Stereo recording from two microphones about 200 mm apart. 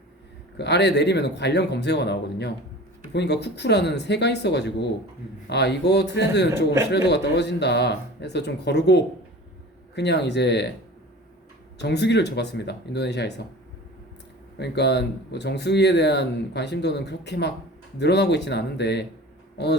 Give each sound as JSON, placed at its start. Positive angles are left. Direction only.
{"t": 0.5, "sound": "speech", "side_deg": 60}
{"t": 11.8, "sound": "speech", "side_deg": 55}
{"t": 14.6, "sound": "speech", "side_deg": 55}